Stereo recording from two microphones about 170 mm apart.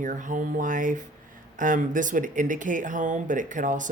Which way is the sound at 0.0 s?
50° right (ahead or behind).